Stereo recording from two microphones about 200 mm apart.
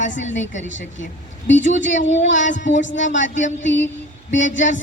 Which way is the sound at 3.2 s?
40° left (ahead or behind).